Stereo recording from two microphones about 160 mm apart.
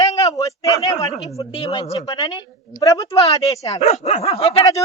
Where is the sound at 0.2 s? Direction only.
20° left (ahead or behind).